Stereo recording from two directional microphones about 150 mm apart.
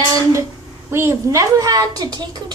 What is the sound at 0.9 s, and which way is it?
A woman's voice, 15° right (ahead or behind).